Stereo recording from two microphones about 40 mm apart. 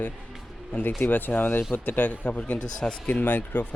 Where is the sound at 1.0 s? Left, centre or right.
Left.